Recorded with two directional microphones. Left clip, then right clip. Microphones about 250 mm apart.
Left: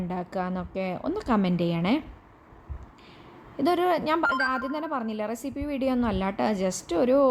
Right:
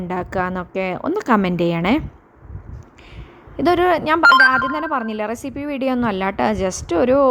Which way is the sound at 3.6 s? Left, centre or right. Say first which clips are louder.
Right 8 dB; centre.